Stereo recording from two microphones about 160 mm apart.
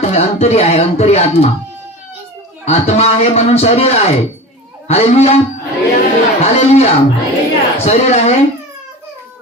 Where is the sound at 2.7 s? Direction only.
40° left (ahead or behind).